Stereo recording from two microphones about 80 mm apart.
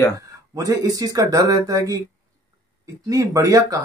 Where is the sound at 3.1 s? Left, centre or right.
Right.